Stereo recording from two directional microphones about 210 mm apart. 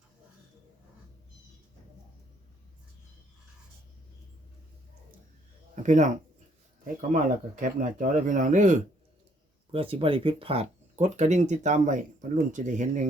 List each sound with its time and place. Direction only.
5.7 s speech: 35° right (ahead or behind)